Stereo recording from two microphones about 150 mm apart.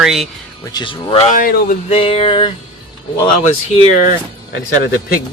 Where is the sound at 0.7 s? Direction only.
30° left (ahead or behind).